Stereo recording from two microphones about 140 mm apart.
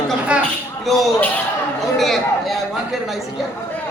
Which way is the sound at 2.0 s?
Centre (ahead or behind).